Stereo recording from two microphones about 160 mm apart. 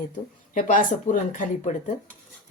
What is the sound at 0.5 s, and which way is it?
Speech, 55° left (ahead or behind).